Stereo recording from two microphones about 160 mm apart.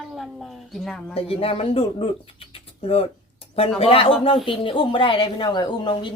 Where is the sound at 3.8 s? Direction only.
35° left (ahead or behind).